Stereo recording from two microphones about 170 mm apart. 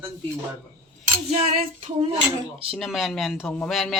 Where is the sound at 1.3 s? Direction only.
35° right (ahead or behind).